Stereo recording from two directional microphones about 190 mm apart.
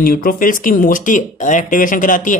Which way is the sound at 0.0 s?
50° left (ahead or behind).